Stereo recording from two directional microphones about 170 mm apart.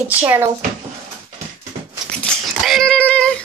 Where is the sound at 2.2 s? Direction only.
Centre (ahead or behind).